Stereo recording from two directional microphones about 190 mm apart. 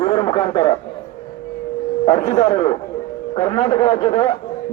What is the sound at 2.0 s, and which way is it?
A man's voice, 35° left (ahead or behind).